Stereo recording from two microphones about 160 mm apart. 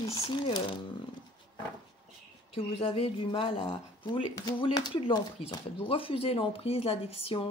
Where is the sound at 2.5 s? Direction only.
35° left (ahead or behind).